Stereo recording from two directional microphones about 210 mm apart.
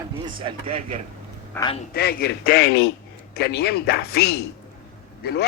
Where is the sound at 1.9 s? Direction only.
50° left (ahead or behind).